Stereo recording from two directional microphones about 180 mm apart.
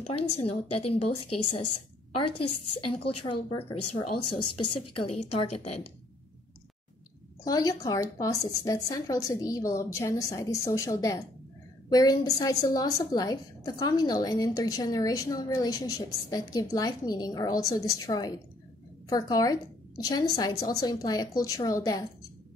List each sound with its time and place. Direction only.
0.0 s a woman's voice: 35° left (ahead or behind)
7.4 s a woman's voice: 20° left (ahead or behind)